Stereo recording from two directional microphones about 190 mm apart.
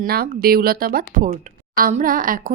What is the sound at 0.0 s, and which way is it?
Speech, 50° right (ahead or behind).